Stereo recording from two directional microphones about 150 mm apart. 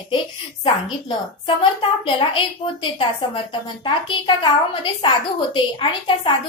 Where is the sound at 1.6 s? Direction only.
35° left (ahead or behind).